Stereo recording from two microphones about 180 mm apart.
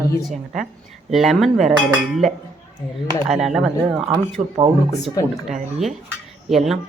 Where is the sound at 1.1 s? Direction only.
Centre (ahead or behind).